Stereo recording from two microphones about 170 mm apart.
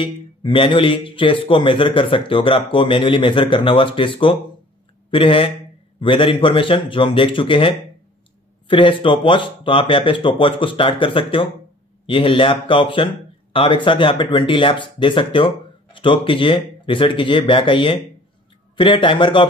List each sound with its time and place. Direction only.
0.0 s speech: 30° left (ahead or behind)